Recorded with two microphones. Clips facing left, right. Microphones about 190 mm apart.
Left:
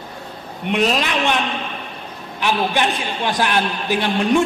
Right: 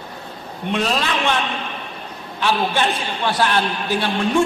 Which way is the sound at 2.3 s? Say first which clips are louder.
Even; 15° left (ahead or behind).